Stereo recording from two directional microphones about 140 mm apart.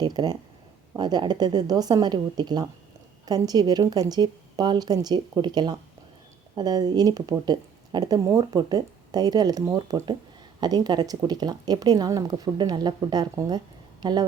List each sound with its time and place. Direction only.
0.0 s a woman's voice: 30° right (ahead or behind)